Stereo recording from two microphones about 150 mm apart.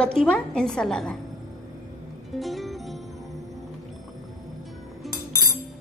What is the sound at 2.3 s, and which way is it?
Music, centre (ahead or behind).